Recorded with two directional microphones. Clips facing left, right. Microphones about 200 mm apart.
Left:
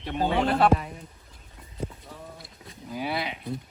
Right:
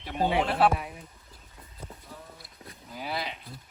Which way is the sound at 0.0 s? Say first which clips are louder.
Left 2 dB; 5° right (ahead or behind).